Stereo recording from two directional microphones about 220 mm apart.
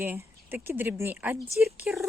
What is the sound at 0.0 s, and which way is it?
A woman's voice, 10° right (ahead or behind).